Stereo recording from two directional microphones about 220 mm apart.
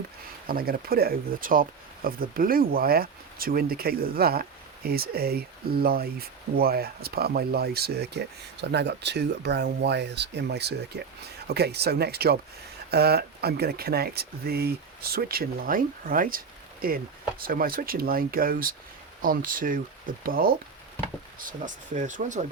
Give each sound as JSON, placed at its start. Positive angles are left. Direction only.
{"t": 0.4, "sound": "speech", "side_deg": -40}
{"t": 21.0, "sound": "a sound", "side_deg": 10}
{"t": 21.3, "sound": "speech", "side_deg": -35}